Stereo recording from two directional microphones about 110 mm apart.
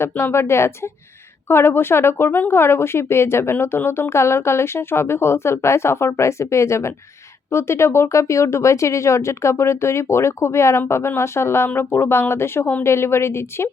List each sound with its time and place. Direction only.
0.0 s speech: 20° left (ahead or behind)